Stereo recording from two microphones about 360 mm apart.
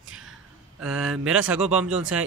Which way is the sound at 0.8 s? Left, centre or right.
Centre.